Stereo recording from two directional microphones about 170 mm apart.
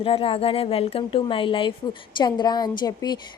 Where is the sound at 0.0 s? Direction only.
35° left (ahead or behind).